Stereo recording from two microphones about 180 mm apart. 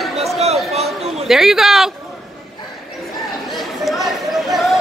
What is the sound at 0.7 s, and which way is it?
Chatter, 35° right (ahead or behind).